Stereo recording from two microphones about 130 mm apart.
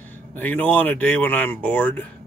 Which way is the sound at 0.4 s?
15° left (ahead or behind).